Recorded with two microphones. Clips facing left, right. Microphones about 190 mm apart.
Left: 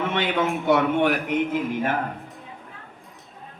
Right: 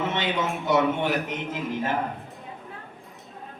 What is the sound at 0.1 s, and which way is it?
A man's voice, 55° left (ahead or behind).